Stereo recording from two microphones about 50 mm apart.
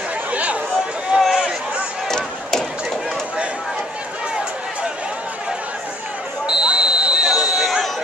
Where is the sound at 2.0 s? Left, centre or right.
Centre.